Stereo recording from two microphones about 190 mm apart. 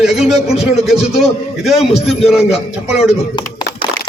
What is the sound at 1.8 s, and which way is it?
Speech, 35° left (ahead or behind).